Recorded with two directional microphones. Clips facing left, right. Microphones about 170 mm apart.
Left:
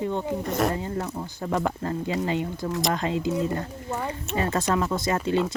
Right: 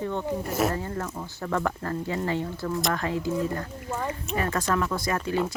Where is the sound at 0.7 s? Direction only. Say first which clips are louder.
Left 2 dB; 15° left (ahead or behind).